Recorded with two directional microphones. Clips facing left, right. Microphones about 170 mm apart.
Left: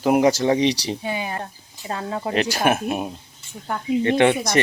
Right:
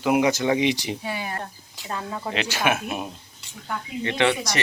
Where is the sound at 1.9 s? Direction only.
35° left (ahead or behind).